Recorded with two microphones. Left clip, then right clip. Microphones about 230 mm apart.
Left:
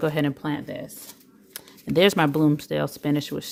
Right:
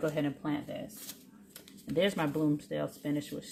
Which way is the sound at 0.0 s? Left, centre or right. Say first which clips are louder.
Left 8 dB; left.